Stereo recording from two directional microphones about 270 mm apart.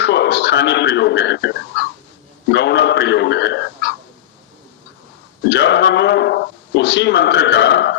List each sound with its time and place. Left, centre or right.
0.0 s speech: left
2.5 s a sound: left
5.5 s speech: left